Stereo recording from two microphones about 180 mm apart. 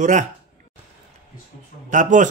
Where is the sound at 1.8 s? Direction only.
45° right (ahead or behind).